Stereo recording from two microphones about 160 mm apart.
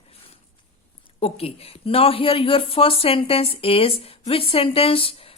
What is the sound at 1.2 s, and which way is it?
Speech, 35° left (ahead or behind).